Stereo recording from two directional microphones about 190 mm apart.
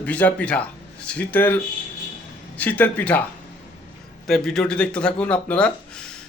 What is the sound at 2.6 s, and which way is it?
Speech, 10° left (ahead or behind).